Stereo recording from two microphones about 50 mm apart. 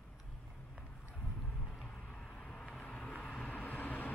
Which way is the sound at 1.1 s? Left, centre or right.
Centre.